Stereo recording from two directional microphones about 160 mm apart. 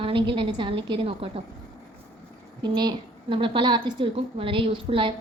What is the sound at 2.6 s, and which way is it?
A woman's voice, 25° right (ahead or behind).